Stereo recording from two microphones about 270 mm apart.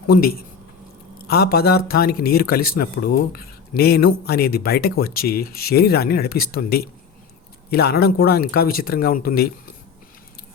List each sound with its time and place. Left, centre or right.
0.1 s speech: left